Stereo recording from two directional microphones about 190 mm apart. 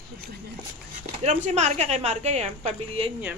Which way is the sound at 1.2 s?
35° right (ahead or behind).